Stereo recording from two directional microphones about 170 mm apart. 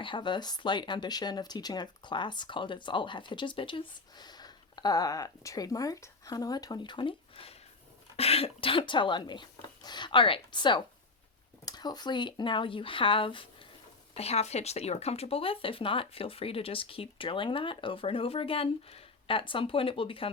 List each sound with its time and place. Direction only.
0.0 s speech: 30° left (ahead or behind)